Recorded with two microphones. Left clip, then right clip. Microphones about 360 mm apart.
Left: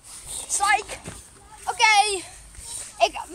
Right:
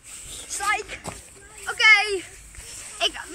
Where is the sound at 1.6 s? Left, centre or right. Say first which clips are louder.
Right 1 dB; centre.